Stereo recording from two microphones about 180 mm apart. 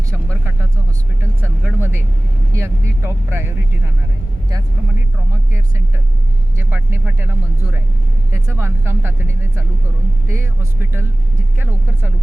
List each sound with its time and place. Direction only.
1.2 s speech: 10° right (ahead or behind)
6.6 s speech: 10° right (ahead or behind)